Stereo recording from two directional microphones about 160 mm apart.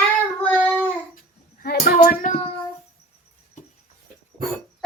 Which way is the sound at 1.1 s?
60° left (ahead or behind).